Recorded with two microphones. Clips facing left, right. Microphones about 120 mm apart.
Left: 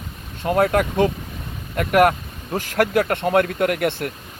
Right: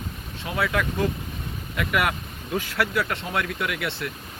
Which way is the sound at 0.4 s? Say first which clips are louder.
Left 8 dB; 50° left (ahead or behind).